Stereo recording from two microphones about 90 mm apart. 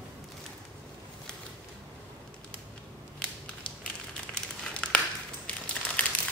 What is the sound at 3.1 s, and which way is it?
Crushing, 10° left (ahead or behind).